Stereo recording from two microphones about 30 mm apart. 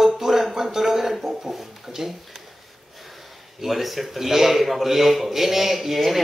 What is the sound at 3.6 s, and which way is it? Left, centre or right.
Speech, centre.